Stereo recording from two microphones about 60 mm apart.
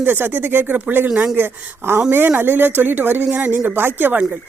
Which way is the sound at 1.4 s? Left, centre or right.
Right.